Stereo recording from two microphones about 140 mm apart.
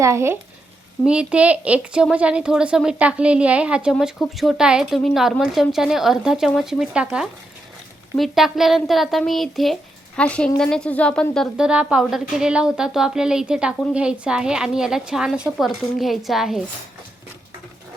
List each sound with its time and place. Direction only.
0.0 s speech: 20° right (ahead or behind)
1.0 s a woman's voice: 5° right (ahead or behind)
11.5 s a woman's voice: 5° right (ahead or behind)